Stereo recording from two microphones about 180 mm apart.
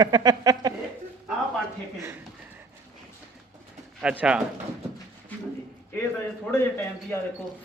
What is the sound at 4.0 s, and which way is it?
Speech, 5° right (ahead or behind).